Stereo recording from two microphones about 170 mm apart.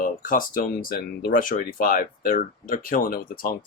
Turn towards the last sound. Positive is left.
turn(degrees=60)  # may be behind; listen again after turning